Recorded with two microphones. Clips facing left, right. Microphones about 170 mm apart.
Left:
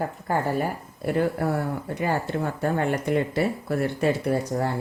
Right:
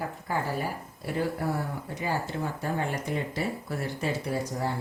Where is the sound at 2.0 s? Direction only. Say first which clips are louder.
Left 4 dB; 60° left (ahead or behind).